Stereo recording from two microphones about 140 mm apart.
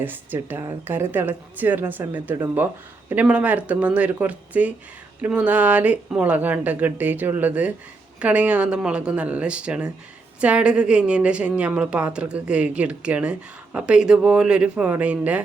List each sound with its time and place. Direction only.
0.0 s a woman's voice: 15° right (ahead or behind)